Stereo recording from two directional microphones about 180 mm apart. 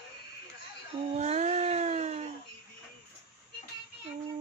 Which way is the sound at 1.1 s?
40° right (ahead or behind).